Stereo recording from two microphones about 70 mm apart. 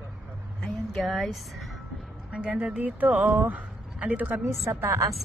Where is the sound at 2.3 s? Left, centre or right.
Centre.